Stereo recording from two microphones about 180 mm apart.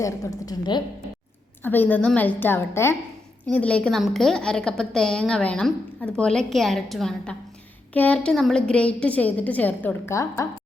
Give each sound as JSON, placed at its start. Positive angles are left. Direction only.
{"t": 0.0, "sound": "a woman's voice", "side_deg": 20}
{"t": 1.6, "sound": "a woman's voice", "side_deg": 10}